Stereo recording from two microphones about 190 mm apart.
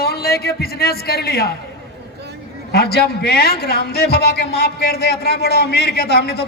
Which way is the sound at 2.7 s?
55° left (ahead or behind).